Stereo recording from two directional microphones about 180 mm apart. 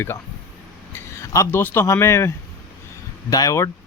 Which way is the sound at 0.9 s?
15° left (ahead or behind).